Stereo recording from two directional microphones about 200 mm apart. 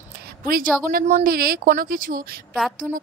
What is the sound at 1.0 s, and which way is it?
Speech, 40° right (ahead or behind).